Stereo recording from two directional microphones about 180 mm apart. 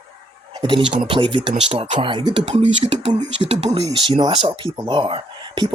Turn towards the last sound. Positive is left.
turn(degrees=-25)  # may be behind; listen again after turning